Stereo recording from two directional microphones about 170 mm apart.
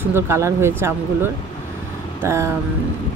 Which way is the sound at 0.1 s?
15° right (ahead or behind).